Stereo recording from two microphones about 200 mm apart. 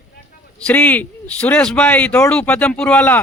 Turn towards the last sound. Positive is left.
turn(degrees=5)  # may be behind; listen again after turning